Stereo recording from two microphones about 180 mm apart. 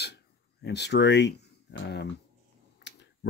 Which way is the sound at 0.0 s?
65° left (ahead or behind).